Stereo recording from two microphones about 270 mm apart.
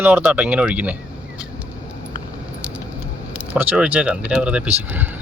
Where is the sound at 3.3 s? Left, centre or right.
Centre.